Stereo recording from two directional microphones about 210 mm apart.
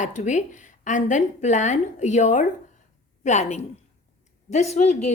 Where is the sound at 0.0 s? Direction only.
35° left (ahead or behind).